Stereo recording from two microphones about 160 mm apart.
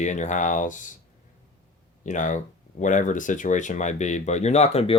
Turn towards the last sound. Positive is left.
turn(degrees=40)  # may be behind; listen again after turning